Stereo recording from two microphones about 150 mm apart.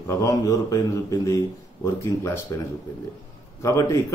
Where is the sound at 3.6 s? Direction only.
20° left (ahead or behind).